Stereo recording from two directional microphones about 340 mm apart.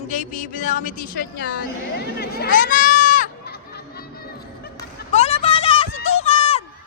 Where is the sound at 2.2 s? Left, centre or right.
Left.